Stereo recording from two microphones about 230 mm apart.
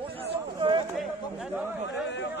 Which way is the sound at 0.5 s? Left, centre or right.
Right.